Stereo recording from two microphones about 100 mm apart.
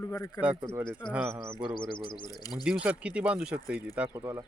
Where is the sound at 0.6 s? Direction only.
25° right (ahead or behind).